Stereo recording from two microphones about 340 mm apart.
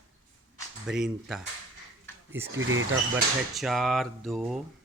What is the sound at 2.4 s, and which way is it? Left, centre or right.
Speech, right.